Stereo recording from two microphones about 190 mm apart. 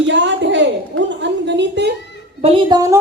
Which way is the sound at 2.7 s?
15° right (ahead or behind).